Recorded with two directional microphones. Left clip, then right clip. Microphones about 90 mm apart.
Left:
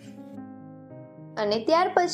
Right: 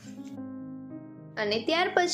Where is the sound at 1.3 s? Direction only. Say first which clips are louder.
Left 3 dB; 30° left (ahead or behind).